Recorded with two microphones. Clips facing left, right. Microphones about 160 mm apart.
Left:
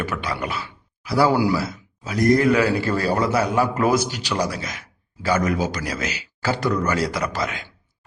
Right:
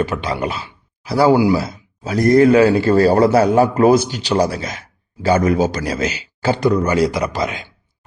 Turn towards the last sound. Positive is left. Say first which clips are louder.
# right 5 dB
turn(degrees=-20)  # may be behind; listen again after turning